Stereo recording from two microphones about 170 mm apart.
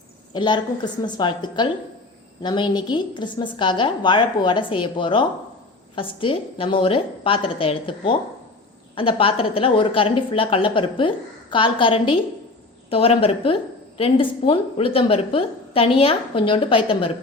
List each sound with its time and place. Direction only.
0.3 s a woman's voice: 25° left (ahead or behind)